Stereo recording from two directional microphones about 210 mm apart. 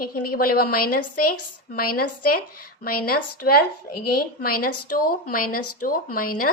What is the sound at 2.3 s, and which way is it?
Speech, 45° left (ahead or behind).